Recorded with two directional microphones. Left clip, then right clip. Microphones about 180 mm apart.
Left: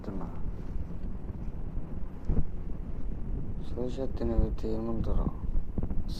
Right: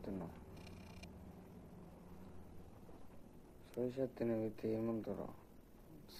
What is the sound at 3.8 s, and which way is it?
Speech, 15° left (ahead or behind).